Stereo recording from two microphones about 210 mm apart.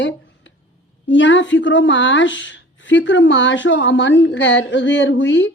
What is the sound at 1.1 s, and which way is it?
A woman's voice, 60° left (ahead or behind).